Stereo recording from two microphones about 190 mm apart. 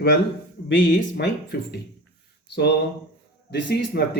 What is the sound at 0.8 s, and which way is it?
Speech, 55° left (ahead or behind).